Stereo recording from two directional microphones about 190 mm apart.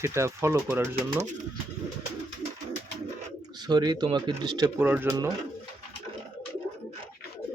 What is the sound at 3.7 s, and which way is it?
Speech, 20° right (ahead or behind).